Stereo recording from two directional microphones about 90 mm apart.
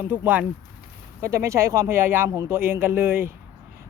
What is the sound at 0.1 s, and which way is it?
Speech, 20° right (ahead or behind).